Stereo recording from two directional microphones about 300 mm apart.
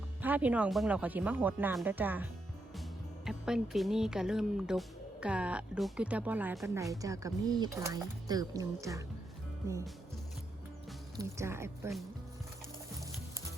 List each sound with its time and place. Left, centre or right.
0.2 s a woman's voice: centre
11.2 s a woman's voice: centre